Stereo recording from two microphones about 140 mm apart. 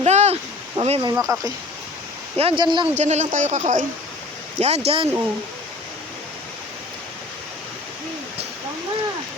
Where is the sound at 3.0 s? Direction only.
55° right (ahead or behind).